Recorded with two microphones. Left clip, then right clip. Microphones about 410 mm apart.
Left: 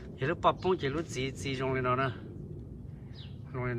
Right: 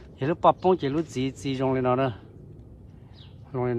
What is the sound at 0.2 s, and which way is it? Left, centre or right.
Speech, centre.